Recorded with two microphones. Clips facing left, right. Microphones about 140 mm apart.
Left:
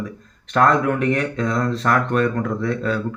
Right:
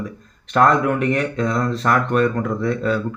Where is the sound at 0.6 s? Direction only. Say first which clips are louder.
Right 1 dB; 5° right (ahead or behind).